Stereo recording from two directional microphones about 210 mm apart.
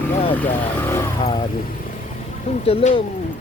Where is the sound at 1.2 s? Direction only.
25° left (ahead or behind).